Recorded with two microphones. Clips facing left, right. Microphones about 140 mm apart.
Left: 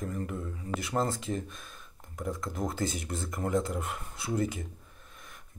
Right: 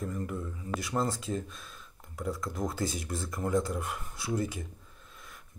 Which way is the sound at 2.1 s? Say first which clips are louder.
Even; 20° left (ahead or behind).